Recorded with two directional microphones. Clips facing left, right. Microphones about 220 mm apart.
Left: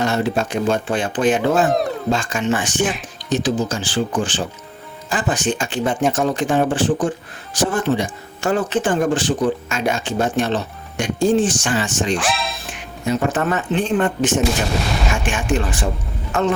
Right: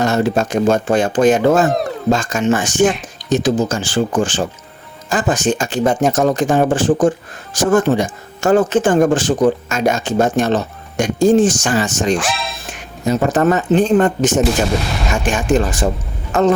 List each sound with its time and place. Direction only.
0.0 s speech: 45° right (ahead or behind)
12.1 s speech: centre (ahead or behind)
13.1 s speech: 40° right (ahead or behind)